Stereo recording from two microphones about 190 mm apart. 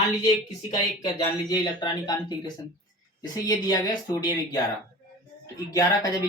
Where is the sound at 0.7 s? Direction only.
20° left (ahead or behind).